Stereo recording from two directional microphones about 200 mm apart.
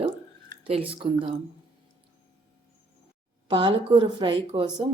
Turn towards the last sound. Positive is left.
turn(degrees=-25)  # may be behind; listen again after turning